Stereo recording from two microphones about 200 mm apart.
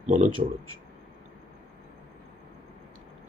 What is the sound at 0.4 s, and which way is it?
Speech, 35° right (ahead or behind).